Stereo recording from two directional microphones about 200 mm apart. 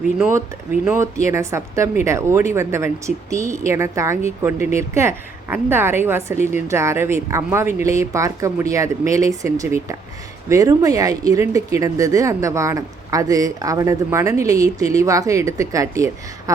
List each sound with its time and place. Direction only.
0.3 s speech: 10° right (ahead or behind)